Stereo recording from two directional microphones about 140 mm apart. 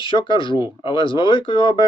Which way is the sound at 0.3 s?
35° left (ahead or behind).